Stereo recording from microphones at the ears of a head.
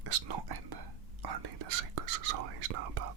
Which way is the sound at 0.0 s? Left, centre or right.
Right.